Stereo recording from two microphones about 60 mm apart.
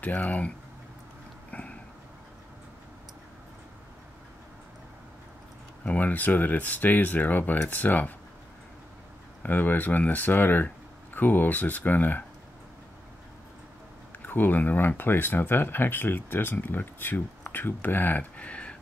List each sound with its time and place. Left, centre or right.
0.0 s speech: left
5.9 s speech: left
9.4 s speech: left
14.2 s speech: left